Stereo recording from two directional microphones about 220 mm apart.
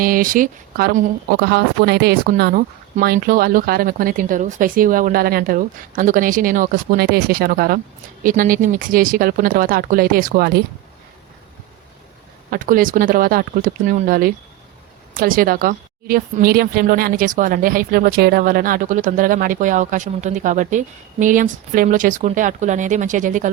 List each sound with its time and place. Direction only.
0.0 s a woman's voice: 40° right (ahead or behind)
12.5 s a woman's voice: 40° right (ahead or behind)